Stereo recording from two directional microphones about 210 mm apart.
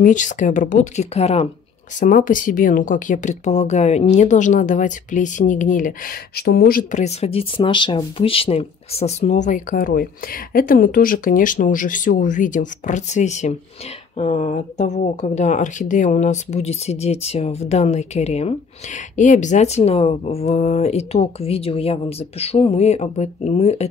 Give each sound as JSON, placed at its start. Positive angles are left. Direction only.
{"t": 0.0, "sound": "speech", "side_deg": 35}
{"t": 2.0, "sound": "speech", "side_deg": 40}